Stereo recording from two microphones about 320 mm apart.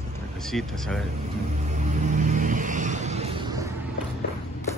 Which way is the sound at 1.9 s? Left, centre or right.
Right.